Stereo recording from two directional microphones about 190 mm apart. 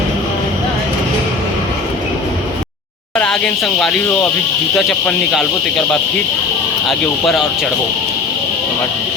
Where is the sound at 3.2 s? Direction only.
5° left (ahead or behind).